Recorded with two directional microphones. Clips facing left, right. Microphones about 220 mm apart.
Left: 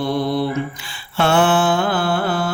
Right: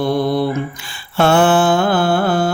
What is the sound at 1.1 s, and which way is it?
Mantra, 40° right (ahead or behind).